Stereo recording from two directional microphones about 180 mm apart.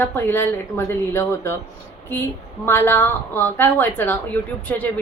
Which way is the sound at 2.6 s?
15° left (ahead or behind).